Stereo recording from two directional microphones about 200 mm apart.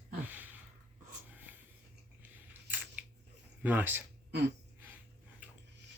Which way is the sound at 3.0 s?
10° right (ahead or behind).